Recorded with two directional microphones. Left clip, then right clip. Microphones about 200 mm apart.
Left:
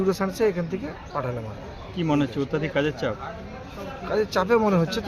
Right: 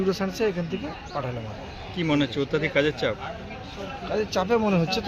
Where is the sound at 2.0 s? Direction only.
30° left (ahead or behind).